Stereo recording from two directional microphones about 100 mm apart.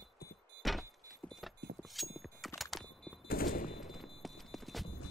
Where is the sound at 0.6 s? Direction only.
Centre (ahead or behind).